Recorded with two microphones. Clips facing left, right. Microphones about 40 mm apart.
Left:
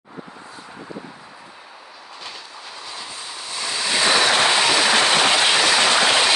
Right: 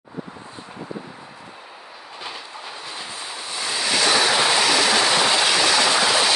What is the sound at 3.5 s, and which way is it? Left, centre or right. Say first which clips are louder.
Waves: even; centre.